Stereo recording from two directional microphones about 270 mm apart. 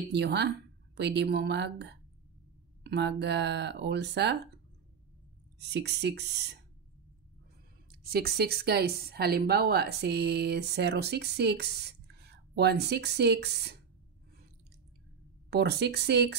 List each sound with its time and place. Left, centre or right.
0.1 s speech: right
5.6 s speech: right
7.9 s speech: right
15.5 s speech: right